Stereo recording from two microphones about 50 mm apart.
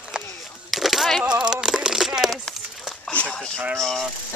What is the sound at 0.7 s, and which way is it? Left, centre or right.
Coin, centre.